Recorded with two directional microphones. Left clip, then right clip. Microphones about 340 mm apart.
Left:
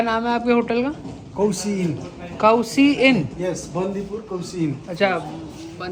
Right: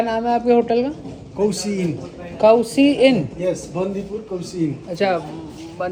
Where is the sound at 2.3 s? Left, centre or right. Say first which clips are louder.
Right 3 dB; centre.